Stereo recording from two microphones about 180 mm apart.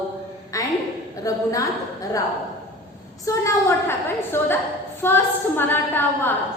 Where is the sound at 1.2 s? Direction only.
20° left (ahead or behind).